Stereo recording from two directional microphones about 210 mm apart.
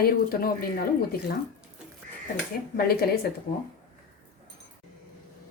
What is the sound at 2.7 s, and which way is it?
Speech, 45° left (ahead or behind).